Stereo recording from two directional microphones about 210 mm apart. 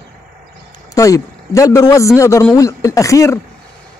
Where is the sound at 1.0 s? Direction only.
15° left (ahead or behind).